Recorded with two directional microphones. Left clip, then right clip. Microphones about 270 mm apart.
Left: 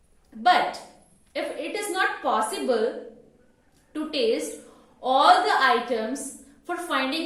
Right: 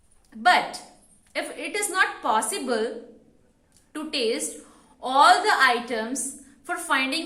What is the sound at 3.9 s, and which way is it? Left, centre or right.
A woman's voice, right.